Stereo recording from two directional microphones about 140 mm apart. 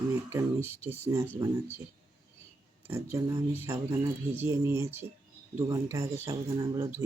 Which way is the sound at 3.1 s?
20° right (ahead or behind).